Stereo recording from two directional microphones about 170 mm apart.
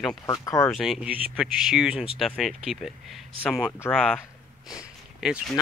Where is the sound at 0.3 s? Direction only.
20° left (ahead or behind).